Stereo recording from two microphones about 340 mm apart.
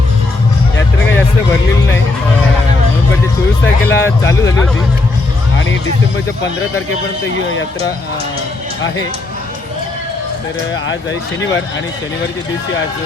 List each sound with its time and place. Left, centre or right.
3.8 s speech: centre